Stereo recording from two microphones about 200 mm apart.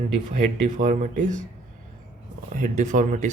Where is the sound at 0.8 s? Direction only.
40° right (ahead or behind).